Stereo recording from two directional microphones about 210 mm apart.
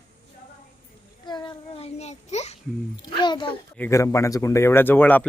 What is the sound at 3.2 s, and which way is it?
Speech, 20° left (ahead or behind).